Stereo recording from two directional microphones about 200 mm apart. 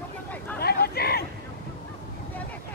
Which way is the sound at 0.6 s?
50° left (ahead or behind).